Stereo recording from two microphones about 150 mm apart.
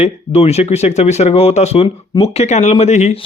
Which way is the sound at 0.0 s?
45° left (ahead or behind).